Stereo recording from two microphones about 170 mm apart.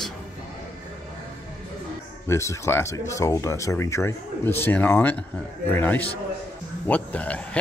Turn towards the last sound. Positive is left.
turn(degrees=10)  # may be behind; listen again after turning